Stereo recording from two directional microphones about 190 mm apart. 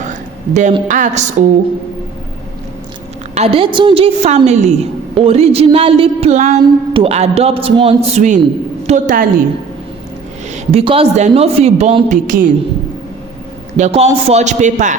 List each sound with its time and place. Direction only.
0.1 s a sound: 40° right (ahead or behind)
0.9 s a woman's voice: 40° right (ahead or behind)
3.3 s a woman's voice: 30° right (ahead or behind)
10.5 s a woman's voice: 30° right (ahead or behind)
13.7 s a woman's voice: 35° right (ahead or behind)